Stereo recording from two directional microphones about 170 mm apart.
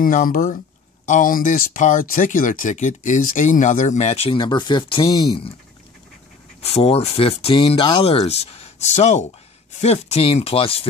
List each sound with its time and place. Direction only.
0.0 s speech: 55° left (ahead or behind); by 5.5 s 35° left (ahead or behind)
6.6 s speech: 35° left (ahead or behind)